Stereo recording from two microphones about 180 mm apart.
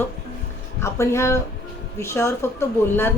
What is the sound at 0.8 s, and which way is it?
Speech, 15° left (ahead or behind).